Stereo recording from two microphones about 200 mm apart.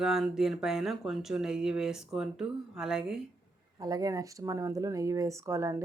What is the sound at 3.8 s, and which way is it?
Speech, 20° right (ahead or behind).